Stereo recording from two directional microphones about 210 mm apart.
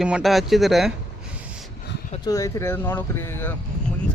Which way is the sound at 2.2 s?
15° left (ahead or behind).